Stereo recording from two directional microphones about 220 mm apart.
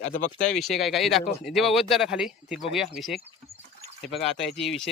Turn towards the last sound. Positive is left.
turn(degrees=0)  # may be behind; listen again after turning